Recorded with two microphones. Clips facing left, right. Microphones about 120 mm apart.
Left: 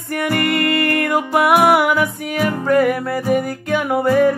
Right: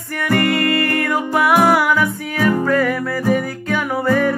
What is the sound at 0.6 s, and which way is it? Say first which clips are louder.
Music: left 1 dB; 20° left (ahead or behind).